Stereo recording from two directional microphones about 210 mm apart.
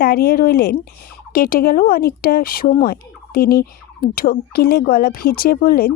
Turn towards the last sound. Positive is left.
turn(degrees=45)  # may be behind; listen again after turning